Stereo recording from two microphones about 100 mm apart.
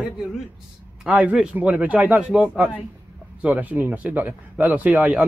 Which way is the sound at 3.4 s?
15° right (ahead or behind).